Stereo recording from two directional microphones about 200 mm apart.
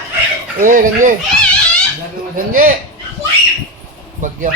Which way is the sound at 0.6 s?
40° right (ahead or behind).